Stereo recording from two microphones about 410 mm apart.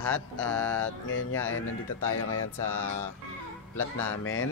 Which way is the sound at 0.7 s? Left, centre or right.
Left.